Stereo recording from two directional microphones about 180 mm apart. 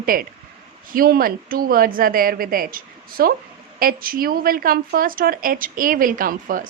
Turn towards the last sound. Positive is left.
turn(degrees=-50)  # may be behind; listen again after turning